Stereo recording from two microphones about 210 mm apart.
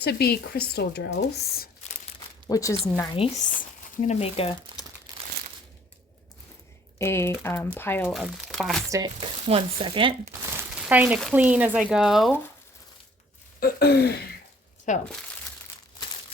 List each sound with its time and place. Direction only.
0.0 s speech: 50° left (ahead or behind)
2.5 s speech: 15° left (ahead or behind)
3.2 s speech: 35° left (ahead or behind)
7.0 s speech: 10° left (ahead or behind)
8.9 s stir: 20° right (ahead or behind)
10.6 s speech: 5° right (ahead or behind)
13.6 s speech: 50° left (ahead or behind)
14.9 s speech: 35° left (ahead or behind)